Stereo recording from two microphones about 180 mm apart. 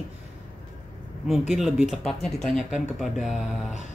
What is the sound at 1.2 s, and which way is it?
Speech, centre (ahead or behind).